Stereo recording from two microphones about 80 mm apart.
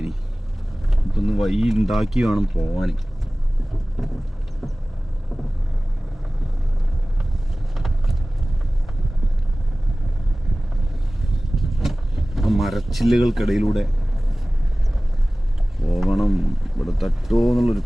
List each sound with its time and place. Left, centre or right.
1.1 s speech: centre
7.8 s vehicle: centre
11.3 s vehicle: centre
15.8 s speech: centre